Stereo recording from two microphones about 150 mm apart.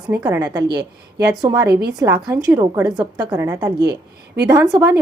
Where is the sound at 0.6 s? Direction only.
90° right.